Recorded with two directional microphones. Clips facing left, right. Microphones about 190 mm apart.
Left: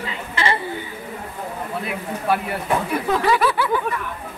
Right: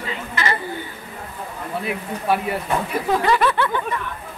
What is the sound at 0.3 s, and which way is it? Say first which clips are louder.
Chatter: left 2 dB; 30° left (ahead or behind).